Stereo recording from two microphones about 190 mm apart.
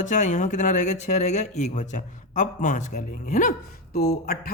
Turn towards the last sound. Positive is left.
turn(degrees=55)  # may be behind; listen again after turning